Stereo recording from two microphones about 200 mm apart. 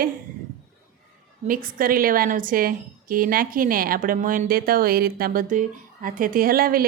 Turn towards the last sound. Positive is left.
turn(degrees=-45)  # may be behind; listen again after turning